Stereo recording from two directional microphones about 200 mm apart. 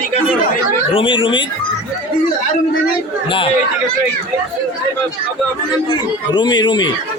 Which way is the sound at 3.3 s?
25° left (ahead or behind).